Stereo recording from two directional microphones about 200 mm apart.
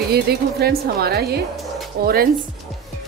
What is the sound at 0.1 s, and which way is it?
A woman's voice, 50° right (ahead or behind).